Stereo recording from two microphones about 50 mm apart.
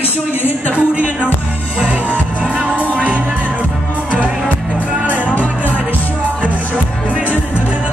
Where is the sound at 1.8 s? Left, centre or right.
Right.